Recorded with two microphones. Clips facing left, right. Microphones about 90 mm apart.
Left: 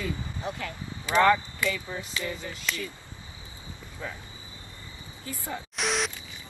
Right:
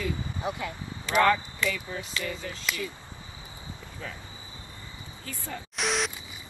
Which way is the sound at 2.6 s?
10° right (ahead or behind).